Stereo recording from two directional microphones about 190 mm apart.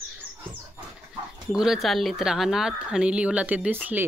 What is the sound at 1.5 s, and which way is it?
Speech, centre (ahead or behind).